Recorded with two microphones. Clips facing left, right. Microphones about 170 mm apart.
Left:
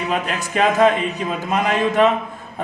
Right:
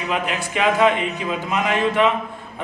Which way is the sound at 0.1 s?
45° left (ahead or behind).